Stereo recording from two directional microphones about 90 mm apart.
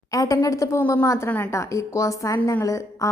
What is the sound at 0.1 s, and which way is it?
A woman's voice, 40° left (ahead or behind).